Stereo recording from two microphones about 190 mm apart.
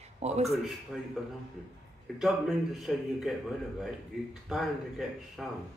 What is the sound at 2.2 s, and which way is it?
A man's voice, centre (ahead or behind).